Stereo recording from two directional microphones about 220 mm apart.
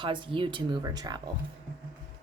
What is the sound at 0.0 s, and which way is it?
Speech, 25° right (ahead or behind).